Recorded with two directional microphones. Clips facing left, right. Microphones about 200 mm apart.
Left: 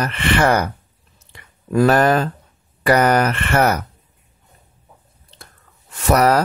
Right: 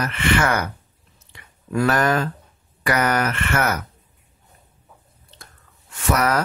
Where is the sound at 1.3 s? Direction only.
35° left (ahead or behind).